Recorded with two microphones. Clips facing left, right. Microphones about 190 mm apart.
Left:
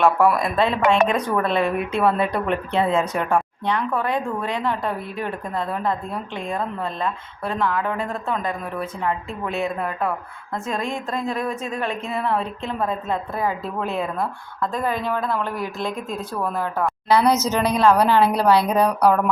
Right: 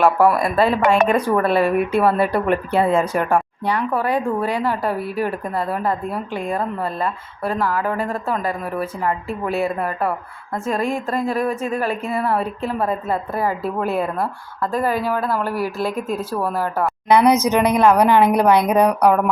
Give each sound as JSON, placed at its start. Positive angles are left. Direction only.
{"t": 0.2, "sound": "speech", "side_deg": -30}
{"t": 0.4, "sound": "a woman's voice", "side_deg": -5}
{"t": 16.3, "sound": "speech", "side_deg": -30}
{"t": 17.1, "sound": "a woman's voice", "side_deg": -15}